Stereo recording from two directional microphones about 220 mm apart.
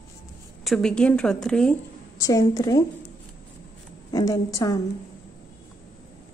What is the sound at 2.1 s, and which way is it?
Speech, 15° left (ahead or behind).